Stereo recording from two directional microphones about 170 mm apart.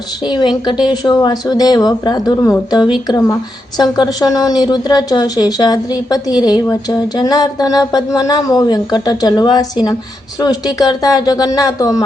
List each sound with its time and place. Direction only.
0.3 s a woman's voice: 25° left (ahead or behind)